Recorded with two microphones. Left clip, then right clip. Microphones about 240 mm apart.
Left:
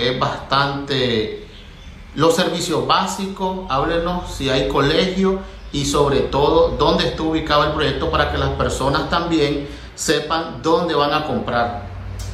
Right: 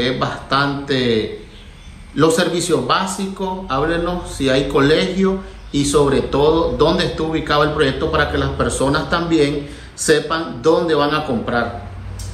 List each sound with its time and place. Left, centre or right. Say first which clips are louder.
0.0 s a man's voice: even; centre